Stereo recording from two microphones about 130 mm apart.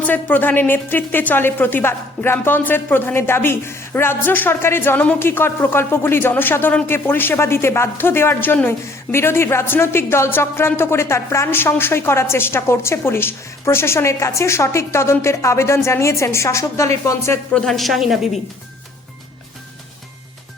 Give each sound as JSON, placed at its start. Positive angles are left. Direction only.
{"t": 0.0, "sound": "speech", "side_deg": 15}
{"t": 17.5, "sound": "a woman's voice", "side_deg": 0}